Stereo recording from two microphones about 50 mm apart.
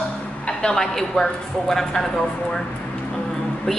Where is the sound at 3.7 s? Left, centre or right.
Centre.